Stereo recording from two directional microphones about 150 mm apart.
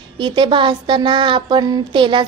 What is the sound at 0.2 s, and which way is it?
A woman's voice, 30° right (ahead or behind).